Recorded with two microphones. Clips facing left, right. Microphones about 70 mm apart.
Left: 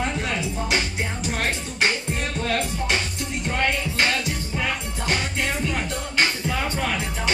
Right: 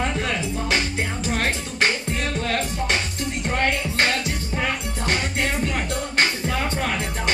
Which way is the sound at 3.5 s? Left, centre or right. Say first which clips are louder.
Right 1 dB; right.